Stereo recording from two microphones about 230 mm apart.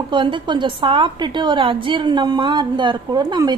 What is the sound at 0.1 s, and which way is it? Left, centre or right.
A woman's voice, right.